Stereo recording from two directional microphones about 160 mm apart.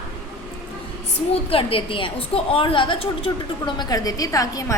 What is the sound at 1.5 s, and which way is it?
A woman's voice, 35° left (ahead or behind).